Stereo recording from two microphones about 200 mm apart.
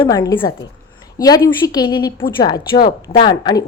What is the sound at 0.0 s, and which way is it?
A woman's voice, 20° left (ahead or behind).